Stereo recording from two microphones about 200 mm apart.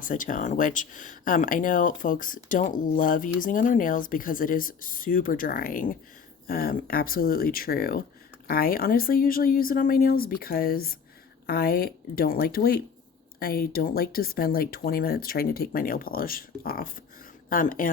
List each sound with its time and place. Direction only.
0.0 s speech: 40° left (ahead or behind)